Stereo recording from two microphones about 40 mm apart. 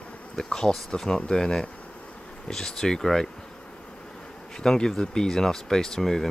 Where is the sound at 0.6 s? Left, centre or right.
Centre.